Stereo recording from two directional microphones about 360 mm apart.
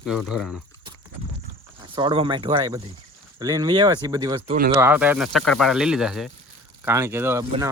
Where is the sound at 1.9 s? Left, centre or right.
Centre.